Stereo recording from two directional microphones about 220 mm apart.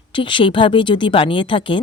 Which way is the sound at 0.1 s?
25° left (ahead or behind).